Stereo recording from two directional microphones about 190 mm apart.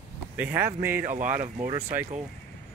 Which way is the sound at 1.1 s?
45° right (ahead or behind).